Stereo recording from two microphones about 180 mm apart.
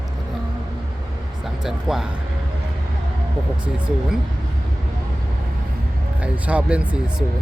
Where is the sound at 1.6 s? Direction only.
5° right (ahead or behind).